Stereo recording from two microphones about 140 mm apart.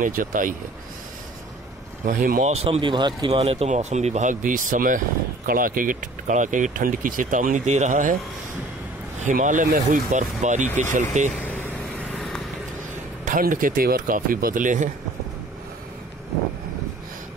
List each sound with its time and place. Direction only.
0.0 s speech: 75° right (ahead or behind)
2.0 s speech: 80° right
2.4 s speech: 45° right (ahead or behind); by 3.3 s 30° right (ahead or behind)
3.3 s speech: 45° right (ahead or behind); by 8.2 s 70° right (ahead or behind)
9.2 s speech: 65° right (ahead or behind)
11.4 s vehicle: 15° left (ahead or behind)
13.2 s speech: 75° right (ahead or behind)